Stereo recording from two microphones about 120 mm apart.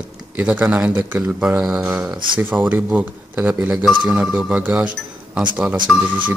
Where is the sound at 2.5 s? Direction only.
15° right (ahead or behind).